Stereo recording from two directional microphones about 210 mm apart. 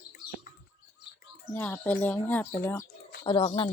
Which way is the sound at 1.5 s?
5° left (ahead or behind).